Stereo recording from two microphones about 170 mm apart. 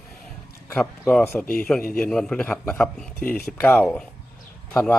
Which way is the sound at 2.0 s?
5° left (ahead or behind).